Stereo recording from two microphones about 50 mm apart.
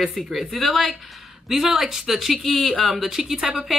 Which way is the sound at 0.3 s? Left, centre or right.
Centre.